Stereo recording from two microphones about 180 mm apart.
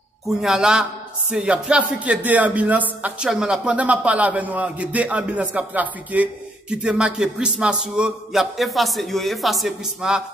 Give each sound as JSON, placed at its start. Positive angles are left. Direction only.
{"t": 0.4, "sound": "a man's voice", "side_deg": -5}